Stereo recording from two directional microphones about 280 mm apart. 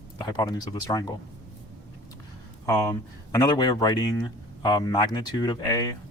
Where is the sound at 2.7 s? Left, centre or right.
Centre.